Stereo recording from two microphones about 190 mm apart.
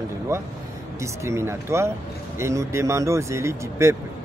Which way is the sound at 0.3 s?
15° right (ahead or behind).